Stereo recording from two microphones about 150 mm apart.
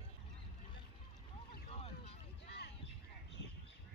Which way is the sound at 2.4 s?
90° left.